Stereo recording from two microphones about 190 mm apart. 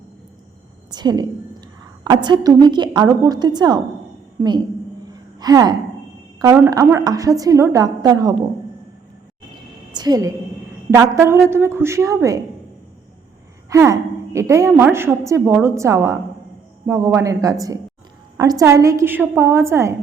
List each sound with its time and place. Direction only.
0.9 s a woman's voice: 20° right (ahead or behind)
9.9 s a woman's voice: 20° right (ahead or behind)
13.7 s a woman's voice: 15° right (ahead or behind)